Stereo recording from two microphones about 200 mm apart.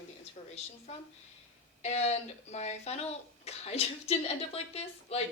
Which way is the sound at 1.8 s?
35° left (ahead or behind).